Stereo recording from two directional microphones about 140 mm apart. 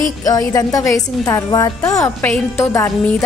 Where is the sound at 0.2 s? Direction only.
25° left (ahead or behind).